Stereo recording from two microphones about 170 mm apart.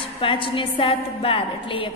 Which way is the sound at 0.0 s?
30° left (ahead or behind).